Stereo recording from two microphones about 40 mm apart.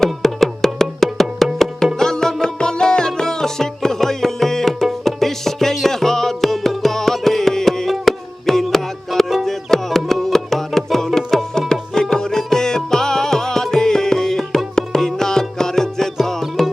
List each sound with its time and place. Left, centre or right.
0.0 s music: centre